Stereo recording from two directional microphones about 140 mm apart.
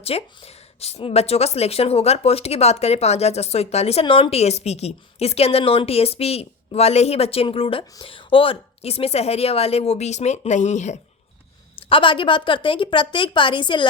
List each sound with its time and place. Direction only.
0.0 s speech: 45° left (ahead or behind)
11.8 s speech: 40° left (ahead or behind)